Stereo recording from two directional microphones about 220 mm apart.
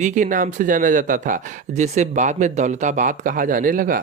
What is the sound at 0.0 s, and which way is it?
Speech, 35° right (ahead or behind).